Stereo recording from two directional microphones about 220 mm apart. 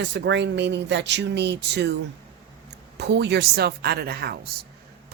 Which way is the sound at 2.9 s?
50° right (ahead or behind).